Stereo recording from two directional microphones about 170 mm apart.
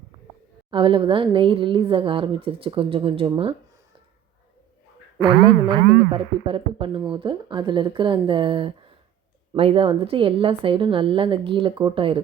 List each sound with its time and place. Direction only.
0.7 s a woman's voice: 30° right (ahead or behind)
5.2 s a woman's voice: 30° right (ahead or behind)